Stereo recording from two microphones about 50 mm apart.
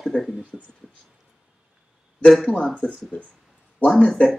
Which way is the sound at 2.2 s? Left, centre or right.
Centre.